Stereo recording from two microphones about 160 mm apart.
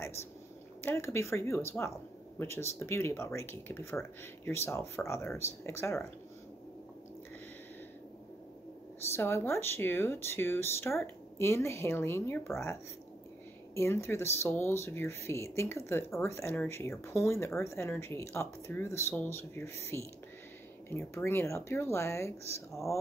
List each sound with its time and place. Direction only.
0.8 s speech: 15° left (ahead or behind)
9.1 s speech: 15° left (ahead or behind)
13.7 s speech: 15° left (ahead or behind)